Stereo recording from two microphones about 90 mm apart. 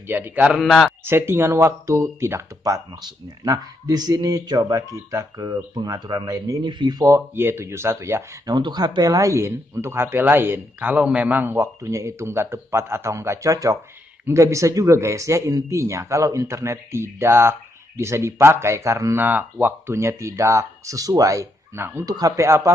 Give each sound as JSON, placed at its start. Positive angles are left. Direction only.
{"t": 0.0, "sound": "speech", "side_deg": -25}
{"t": 0.5, "sound": "a man's voice", "side_deg": 0}
{"t": 1.0, "sound": "speech", "side_deg": -25}
{"t": 2.6, "sound": "speech", "side_deg": -45}
{"t": 7.1, "sound": "speech", "side_deg": -25}
{"t": 8.5, "sound": "speech", "side_deg": -50}
{"t": 11.4, "sound": "speech", "side_deg": -35}
{"t": 19.1, "sound": "speech", "side_deg": -20}
{"t": 21.7, "sound": "speech", "side_deg": -25}
{"t": 22.0, "sound": "speech", "side_deg": -40}